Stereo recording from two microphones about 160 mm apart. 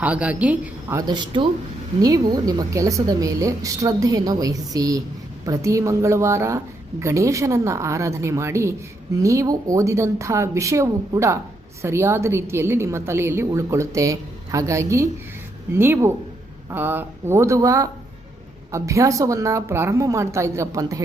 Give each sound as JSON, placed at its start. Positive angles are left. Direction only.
{"t": 0.0, "sound": "a woman's voice", "side_deg": -5}
{"t": 0.9, "sound": "a woman's voice", "side_deg": -25}